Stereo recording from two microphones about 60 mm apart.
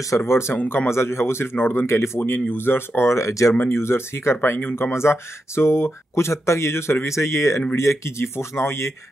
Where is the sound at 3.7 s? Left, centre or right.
Left.